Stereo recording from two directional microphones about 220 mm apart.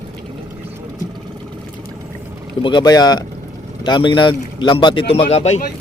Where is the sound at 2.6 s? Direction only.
20° left (ahead or behind).